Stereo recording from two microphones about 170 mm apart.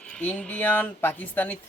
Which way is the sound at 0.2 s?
10° left (ahead or behind).